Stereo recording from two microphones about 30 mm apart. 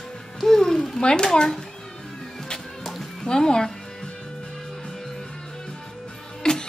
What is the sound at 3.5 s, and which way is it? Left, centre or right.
Speech, left.